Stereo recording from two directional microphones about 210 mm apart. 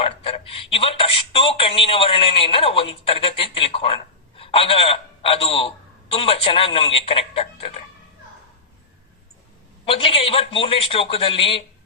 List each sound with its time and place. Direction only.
0.0 s speech: 25° left (ahead or behind)
9.8 s a man's voice: 25° left (ahead or behind)